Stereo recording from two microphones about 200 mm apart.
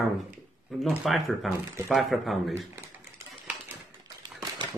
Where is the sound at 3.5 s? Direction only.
5° right (ahead or behind).